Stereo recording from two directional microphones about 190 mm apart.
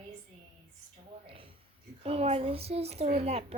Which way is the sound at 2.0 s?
30° right (ahead or behind).